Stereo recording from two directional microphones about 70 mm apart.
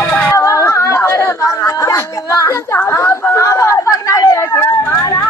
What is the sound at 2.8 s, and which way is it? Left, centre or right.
Speech, left.